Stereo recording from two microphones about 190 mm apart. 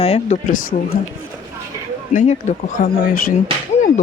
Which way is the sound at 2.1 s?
40° left (ahead or behind).